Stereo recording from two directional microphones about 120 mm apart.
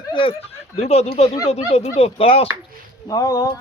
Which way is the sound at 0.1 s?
45° left (ahead or behind).